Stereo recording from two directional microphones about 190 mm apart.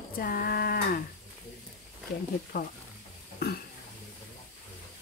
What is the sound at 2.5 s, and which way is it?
Speech, 55° left (ahead or behind).